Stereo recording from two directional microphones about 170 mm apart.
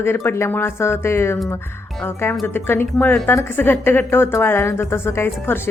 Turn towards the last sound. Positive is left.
turn(degrees=15)  # may be behind; listen again after turning